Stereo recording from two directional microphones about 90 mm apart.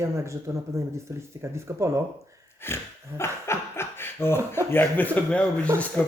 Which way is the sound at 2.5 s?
25° left (ahead or behind).